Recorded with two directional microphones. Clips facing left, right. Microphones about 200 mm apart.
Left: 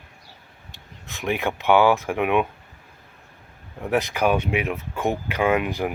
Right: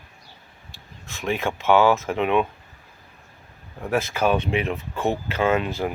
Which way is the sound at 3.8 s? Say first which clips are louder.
Left 1 dB; 15° left (ahead or behind).